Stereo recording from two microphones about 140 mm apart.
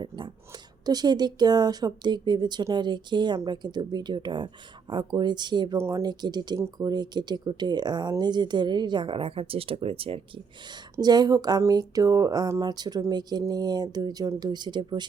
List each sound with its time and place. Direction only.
0.9 s speech: 30° right (ahead or behind)
5.7 s speech: 20° right (ahead or behind)
6.0 s speech: 30° right (ahead or behind)
10.9 s speech: 30° right (ahead or behind)